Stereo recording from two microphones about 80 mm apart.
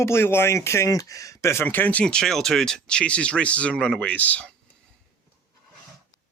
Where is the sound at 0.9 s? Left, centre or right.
Left.